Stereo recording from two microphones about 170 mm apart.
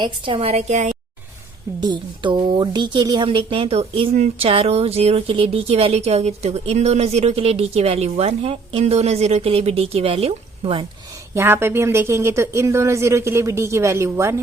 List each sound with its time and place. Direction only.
0.0 s a woman's voice: 30° right (ahead or behind)
1.8 s a woman's voice: 25° right (ahead or behind)
11.3 s speech: 15° right (ahead or behind)